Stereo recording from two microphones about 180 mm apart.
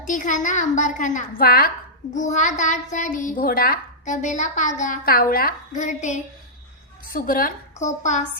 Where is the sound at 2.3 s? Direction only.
45° left (ahead or behind).